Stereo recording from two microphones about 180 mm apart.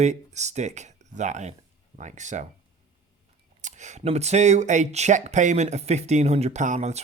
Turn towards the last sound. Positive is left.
turn(degrees=-40)  # may be behind; listen again after turning